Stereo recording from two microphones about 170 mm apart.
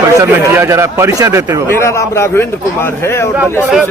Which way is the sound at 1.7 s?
15° left (ahead or behind).